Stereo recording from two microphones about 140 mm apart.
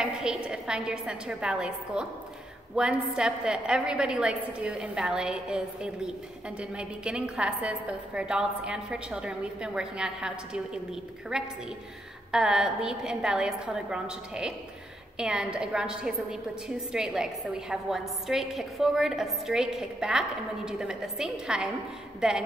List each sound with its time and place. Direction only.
0.0 s a woman's voice: 5° right (ahead or behind)